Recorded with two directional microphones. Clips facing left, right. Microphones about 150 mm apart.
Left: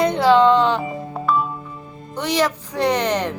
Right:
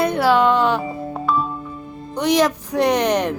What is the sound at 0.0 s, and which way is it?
Music, 10° right (ahead or behind).